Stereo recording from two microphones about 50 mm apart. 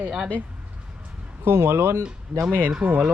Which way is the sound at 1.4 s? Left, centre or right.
Right.